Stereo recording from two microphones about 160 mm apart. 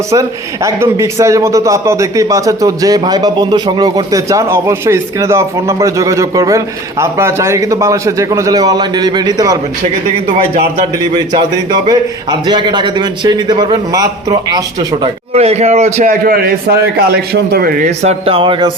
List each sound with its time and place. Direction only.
0.1 s a man's voice: 20° right (ahead or behind)
11.1 s a man's voice: 25° right (ahead or behind)
15.0 s a man's voice: 40° right (ahead or behind)
16.2 s a man's voice: 65° right (ahead or behind)
17.3 s a man's voice: 80° right
18.0 s speech: 40° right (ahead or behind)